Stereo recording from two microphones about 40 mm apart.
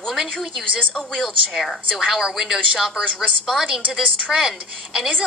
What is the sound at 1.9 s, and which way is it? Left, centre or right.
Speech, centre.